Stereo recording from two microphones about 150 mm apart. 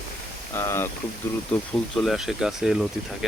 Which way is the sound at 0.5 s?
15° left (ahead or behind).